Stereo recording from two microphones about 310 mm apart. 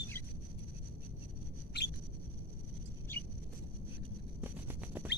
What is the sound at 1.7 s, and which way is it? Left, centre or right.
Bird, left.